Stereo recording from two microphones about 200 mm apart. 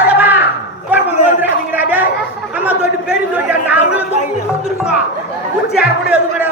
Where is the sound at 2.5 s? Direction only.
5° right (ahead or behind).